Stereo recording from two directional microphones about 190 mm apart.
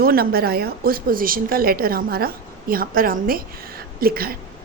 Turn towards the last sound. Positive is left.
turn(degrees=-50)  # may be behind; listen again after turning